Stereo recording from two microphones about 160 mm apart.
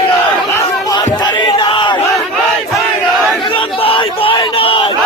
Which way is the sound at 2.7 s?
Centre (ahead or behind).